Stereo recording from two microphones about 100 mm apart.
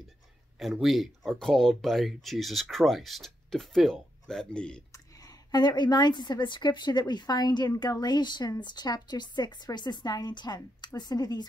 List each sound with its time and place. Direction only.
0.6 s speech: centre (ahead or behind)
4.9 s a woman's voice: 35° left (ahead or behind)